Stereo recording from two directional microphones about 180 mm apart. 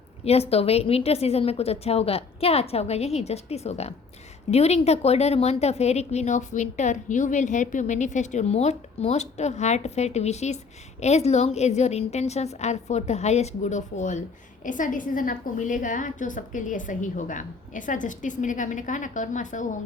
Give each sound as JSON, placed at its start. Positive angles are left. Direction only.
{"t": 0.3, "sound": "a woman's voice", "side_deg": 35}